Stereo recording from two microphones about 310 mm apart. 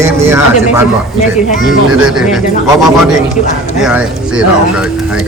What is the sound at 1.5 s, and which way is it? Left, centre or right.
Speech, left.